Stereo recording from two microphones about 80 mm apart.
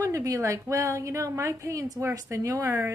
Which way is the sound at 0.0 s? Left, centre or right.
Right.